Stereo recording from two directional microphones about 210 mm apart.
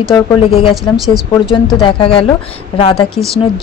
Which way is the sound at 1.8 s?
25° left (ahead or behind).